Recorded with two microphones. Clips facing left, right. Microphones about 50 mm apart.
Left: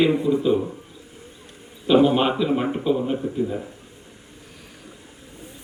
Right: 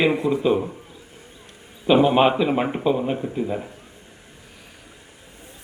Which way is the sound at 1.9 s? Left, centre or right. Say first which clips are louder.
Right 1 dB; right.